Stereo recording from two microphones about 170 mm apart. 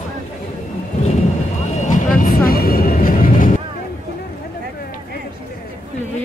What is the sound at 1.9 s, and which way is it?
Vehicle, 55° left (ahead or behind).